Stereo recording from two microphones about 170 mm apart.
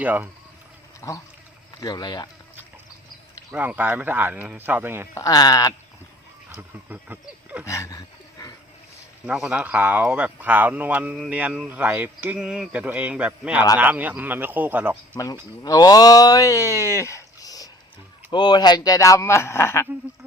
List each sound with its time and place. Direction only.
0.0 s speech: 10° right (ahead or behind)
1.0 s speech: 15° left (ahead or behind)
3.5 s speech: 10° right (ahead or behind)
5.1 s speech: 20° left (ahead or behind)
6.5 s speech: 10° right (ahead or behind)
7.6 s a sound: 15° left (ahead or behind)
9.2 s speech: 5° right (ahead or behind)
15.1 s speech: 20° left (ahead or behind)